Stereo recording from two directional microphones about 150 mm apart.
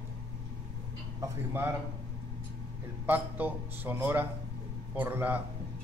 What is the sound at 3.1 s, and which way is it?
A man's voice, 10° right (ahead or behind).